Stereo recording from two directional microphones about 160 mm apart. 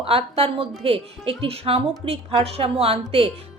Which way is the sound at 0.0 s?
35° right (ahead or behind).